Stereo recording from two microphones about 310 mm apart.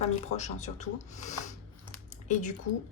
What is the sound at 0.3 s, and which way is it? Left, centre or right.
Speech, left.